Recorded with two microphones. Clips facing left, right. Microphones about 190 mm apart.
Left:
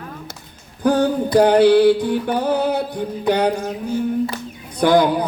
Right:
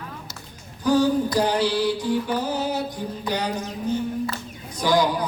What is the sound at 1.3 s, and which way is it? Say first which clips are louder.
Music: left 10 dB; 60° left (ahead or behind).